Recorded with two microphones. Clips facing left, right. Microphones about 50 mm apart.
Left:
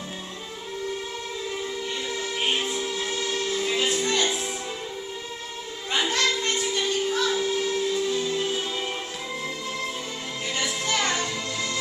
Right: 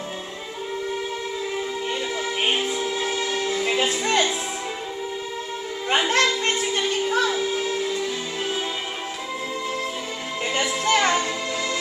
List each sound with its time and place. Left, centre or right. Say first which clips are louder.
1.9 s music: right 4 dB; right
5.9 s a sound: right 4 dB; right
7.2 s music: right 1 dB; right
10.4 s music: right 6 dB; right
11.1 s music: right 4 dB; right